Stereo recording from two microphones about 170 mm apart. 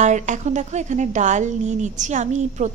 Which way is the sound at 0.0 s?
45° right (ahead or behind).